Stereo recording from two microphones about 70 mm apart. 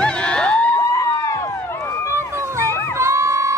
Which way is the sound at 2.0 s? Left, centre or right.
Right.